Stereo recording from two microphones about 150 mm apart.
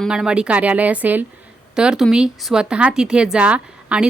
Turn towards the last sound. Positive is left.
turn(degrees=-5)  # may be behind; listen again after turning